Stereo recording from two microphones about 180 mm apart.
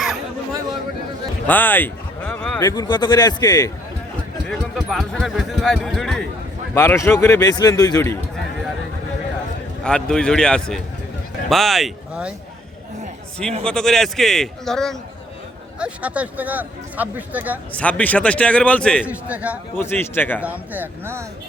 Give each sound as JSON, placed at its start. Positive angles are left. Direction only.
{"t": 1.5, "sound": "speech", "side_deg": 10}
{"t": 2.6, "sound": "speech", "side_deg": 20}
{"t": 4.4, "sound": "speech", "side_deg": 0}
{"t": 6.7, "sound": "a man's voice", "side_deg": 15}
{"t": 9.8, "sound": "speech", "side_deg": 5}
{"t": 13.7, "sound": "speech", "side_deg": 5}
{"t": 17.7, "sound": "a man's voice", "side_deg": 5}
{"t": 19.0, "sound": "speech", "side_deg": -10}
{"t": 19.7, "sound": "a man's voice", "side_deg": 15}
{"t": 20.4, "sound": "speech", "side_deg": -10}